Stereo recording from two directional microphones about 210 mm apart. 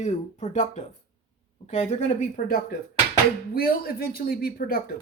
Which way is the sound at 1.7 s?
35° left (ahead or behind).